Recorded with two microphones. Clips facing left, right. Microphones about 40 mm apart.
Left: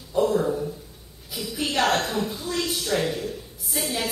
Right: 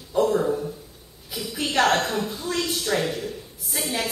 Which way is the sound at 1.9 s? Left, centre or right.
Right.